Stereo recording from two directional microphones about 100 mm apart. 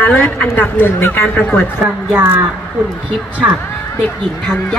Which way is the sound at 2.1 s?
20° right (ahead or behind).